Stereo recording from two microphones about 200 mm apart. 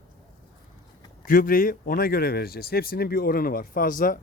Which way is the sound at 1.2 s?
45° left (ahead or behind).